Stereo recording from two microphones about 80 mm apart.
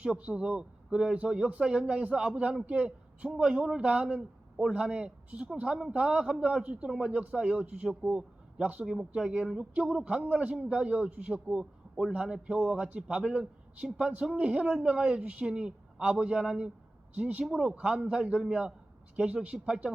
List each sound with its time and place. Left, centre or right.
0.0 s a man's voice: centre